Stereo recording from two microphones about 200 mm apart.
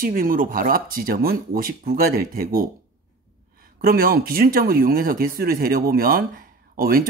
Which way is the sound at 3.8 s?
50° right (ahead or behind).